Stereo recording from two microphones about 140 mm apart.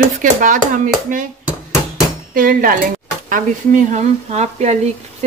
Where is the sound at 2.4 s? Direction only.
90° right.